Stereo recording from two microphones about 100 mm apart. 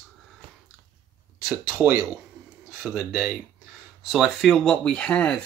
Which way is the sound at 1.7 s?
20° right (ahead or behind).